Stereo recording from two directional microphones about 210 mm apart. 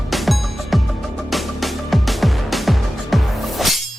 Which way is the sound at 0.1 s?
Centre (ahead or behind).